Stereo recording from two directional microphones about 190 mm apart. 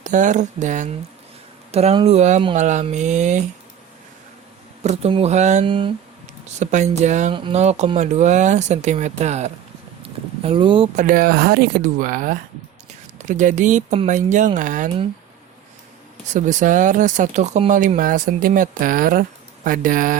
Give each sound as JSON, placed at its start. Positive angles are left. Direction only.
{"t": 0.0, "sound": "speech", "side_deg": -40}
{"t": 4.8, "sound": "speech", "side_deg": -35}
{"t": 5.6, "sound": "speech", "side_deg": -25}
{"t": 6.4, "sound": "speech", "side_deg": -40}
{"t": 10.0, "sound": "a sound", "side_deg": -30}
{"t": 10.9, "sound": "speech", "side_deg": -45}
{"t": 16.3, "sound": "speech", "side_deg": -40}